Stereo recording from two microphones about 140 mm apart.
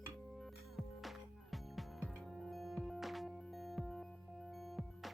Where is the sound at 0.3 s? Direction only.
Centre (ahead or behind).